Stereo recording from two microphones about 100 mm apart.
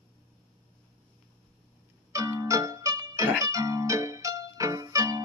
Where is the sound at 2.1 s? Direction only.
35° right (ahead or behind).